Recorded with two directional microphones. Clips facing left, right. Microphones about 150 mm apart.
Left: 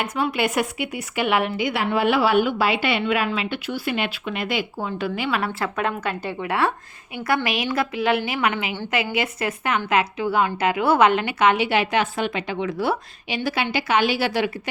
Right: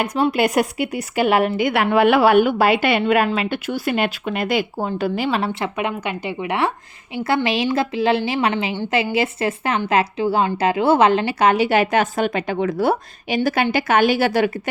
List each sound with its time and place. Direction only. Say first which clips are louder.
0.0 s a woman's voice: right 5 dB; 40° right (ahead or behind)
5.5 s a woman's voice: right 2 dB; 20° right (ahead or behind); by 14.5 s 50° right (ahead or behind)